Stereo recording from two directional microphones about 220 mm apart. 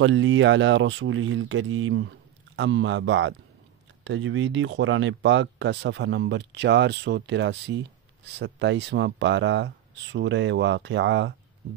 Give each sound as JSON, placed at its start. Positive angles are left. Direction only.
{"t": 0.0, "sound": "speech", "side_deg": -60}